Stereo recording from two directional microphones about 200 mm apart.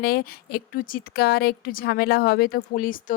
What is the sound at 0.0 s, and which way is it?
A woman's voice, 50° left (ahead or behind).